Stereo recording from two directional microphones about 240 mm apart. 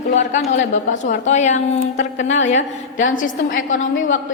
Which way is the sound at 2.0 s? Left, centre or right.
Left.